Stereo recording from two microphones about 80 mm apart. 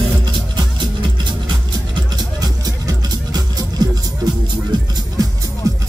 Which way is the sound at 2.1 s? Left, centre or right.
Right.